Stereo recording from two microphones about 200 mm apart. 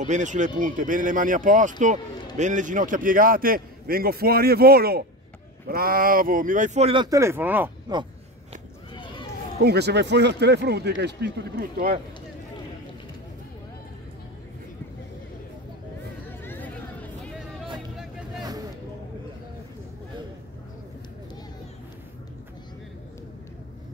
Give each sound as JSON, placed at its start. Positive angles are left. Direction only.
{"t": 0.0, "sound": "a man's voice", "side_deg": -40}
{"t": 9.6, "sound": "speech", "side_deg": -55}
{"t": 16.4, "sound": "chatter", "side_deg": 10}